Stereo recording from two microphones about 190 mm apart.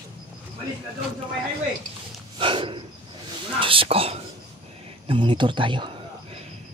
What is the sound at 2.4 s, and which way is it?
Speech, 25° right (ahead or behind).